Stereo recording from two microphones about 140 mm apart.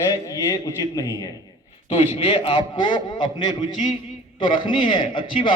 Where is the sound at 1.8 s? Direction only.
45° left (ahead or behind).